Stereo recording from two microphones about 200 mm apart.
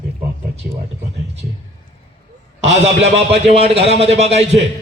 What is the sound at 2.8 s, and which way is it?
Speech, 30° right (ahead or behind).